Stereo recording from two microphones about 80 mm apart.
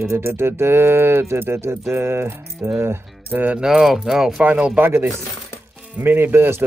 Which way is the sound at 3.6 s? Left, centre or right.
Centre.